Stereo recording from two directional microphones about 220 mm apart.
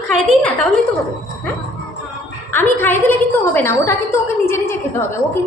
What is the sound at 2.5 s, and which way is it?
A woman's voice, 10° left (ahead or behind).